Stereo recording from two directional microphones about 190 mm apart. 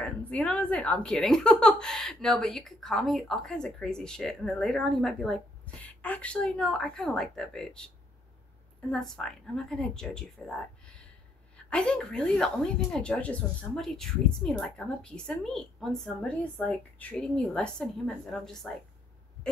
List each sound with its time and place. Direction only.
0.0 s speech: 5° left (ahead or behind)
8.9 s speech: 5° left (ahead or behind)